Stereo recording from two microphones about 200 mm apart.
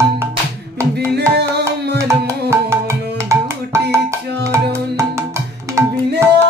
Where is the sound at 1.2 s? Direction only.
55° right (ahead or behind).